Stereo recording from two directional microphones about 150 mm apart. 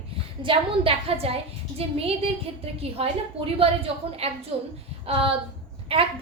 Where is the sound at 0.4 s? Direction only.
35° right (ahead or behind).